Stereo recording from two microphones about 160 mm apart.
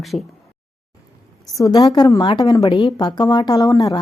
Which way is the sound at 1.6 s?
25° left (ahead or behind).